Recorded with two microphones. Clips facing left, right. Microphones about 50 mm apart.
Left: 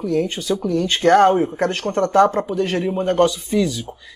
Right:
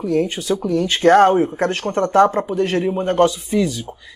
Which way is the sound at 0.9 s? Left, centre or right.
Centre.